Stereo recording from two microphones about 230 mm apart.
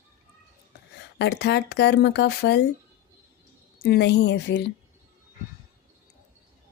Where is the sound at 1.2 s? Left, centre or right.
Left.